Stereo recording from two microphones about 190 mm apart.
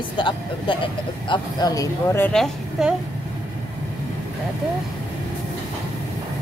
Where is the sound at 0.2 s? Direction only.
25° left (ahead or behind); by 2.9 s 5° left (ahead or behind).